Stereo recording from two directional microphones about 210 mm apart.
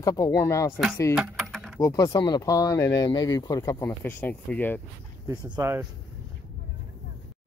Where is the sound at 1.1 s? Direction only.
5° right (ahead or behind).